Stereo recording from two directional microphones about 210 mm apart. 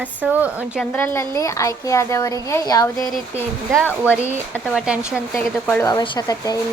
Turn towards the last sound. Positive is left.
turn(degrees=20)  # may be behind; listen again after turning